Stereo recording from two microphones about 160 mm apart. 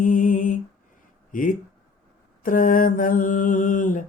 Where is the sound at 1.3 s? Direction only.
55° left (ahead or behind).